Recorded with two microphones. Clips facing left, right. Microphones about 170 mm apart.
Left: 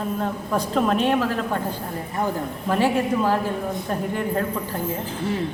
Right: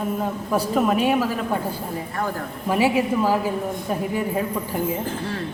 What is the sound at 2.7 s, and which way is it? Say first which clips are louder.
A woman's voice: right 1 dB; 10° right (ahead or behind).